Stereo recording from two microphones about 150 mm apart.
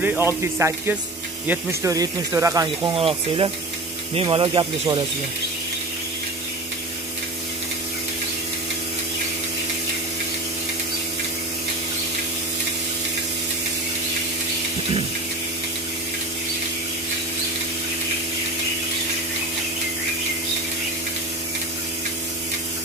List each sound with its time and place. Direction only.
0.0 s speech: 15° right (ahead or behind)
3.0 s speech: 35° right (ahead or behind)